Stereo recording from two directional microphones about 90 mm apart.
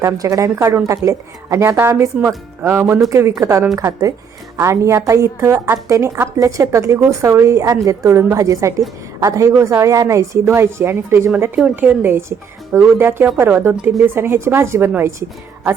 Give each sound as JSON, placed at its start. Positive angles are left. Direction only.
{"t": 0.0, "sound": "a woman's voice", "side_deg": -35}